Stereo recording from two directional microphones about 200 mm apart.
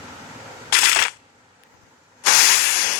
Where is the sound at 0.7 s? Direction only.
50° left (ahead or behind).